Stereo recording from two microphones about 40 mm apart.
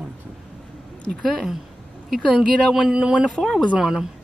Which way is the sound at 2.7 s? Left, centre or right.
Centre.